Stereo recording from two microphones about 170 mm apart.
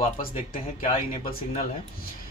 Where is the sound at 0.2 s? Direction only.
55° left (ahead or behind).